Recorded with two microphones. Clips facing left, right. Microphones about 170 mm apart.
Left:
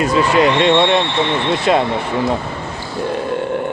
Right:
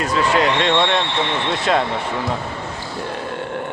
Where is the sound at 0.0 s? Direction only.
5° left (ahead or behind).